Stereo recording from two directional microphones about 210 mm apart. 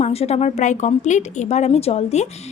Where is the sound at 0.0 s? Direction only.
30° left (ahead or behind).